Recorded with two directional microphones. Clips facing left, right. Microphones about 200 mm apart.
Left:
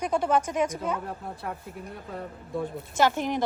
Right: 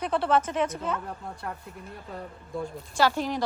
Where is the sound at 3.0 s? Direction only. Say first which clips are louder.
Left 1 dB; 20° left (ahead or behind).